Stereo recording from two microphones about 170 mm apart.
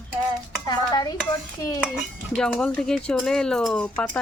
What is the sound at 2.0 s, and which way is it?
Speech, 5° left (ahead or behind).